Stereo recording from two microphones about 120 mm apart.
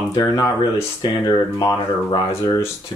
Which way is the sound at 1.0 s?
35° left (ahead or behind).